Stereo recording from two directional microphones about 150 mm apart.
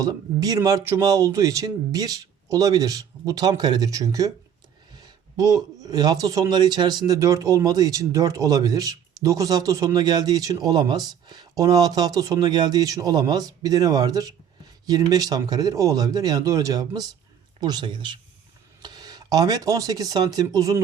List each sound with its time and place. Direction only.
0.0 s a man's voice: 25° right (ahead or behind)